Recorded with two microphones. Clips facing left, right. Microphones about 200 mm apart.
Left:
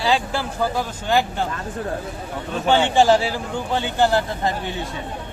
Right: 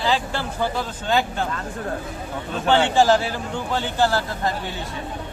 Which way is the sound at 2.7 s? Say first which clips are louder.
Left 1 dB; 20° left (ahead or behind).